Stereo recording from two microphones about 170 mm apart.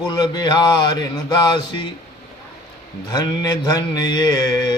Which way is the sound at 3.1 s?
25° left (ahead or behind).